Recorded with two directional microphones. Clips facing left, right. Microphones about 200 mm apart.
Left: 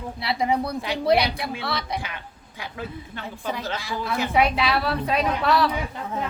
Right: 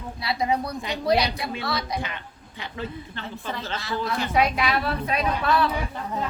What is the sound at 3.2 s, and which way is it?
A woman's voice, 10° left (ahead or behind).